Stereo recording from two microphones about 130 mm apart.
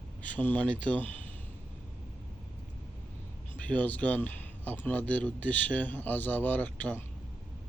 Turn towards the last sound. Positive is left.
turn(degrees=10)  # may be behind; listen again after turning